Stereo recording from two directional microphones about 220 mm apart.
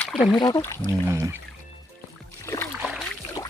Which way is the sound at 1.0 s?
15° right (ahead or behind).